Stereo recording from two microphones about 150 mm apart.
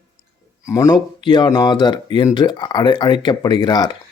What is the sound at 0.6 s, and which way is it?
Speech, 20° left (ahead or behind).